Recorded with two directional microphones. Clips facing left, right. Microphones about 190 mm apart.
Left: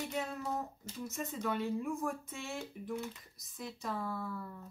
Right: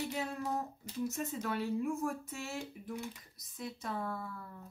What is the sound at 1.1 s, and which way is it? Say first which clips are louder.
Speech: even; 5° right (ahead or behind).